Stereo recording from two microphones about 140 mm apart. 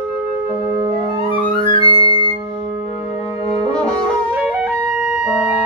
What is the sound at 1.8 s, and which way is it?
Flute, 35° right (ahead or behind).